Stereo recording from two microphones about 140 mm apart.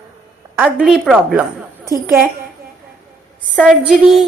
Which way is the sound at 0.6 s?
5° right (ahead or behind).